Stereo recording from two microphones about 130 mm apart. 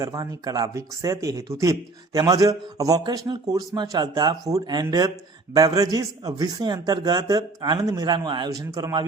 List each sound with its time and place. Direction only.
0.0 s a man's voice: 25° right (ahead or behind)